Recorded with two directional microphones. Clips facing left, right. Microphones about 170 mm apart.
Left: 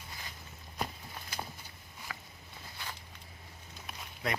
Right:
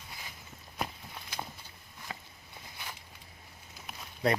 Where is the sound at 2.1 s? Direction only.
25° right (ahead or behind).